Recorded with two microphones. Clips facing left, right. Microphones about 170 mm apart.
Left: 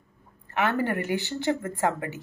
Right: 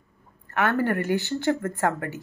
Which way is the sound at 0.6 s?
15° left (ahead or behind).